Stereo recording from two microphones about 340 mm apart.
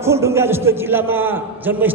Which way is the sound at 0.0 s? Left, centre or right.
Centre.